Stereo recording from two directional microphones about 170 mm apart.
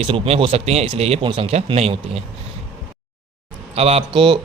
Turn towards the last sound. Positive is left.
turn(degrees=-30)  # may be behind; listen again after turning